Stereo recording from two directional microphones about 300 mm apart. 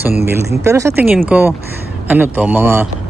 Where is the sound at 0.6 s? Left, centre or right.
Centre.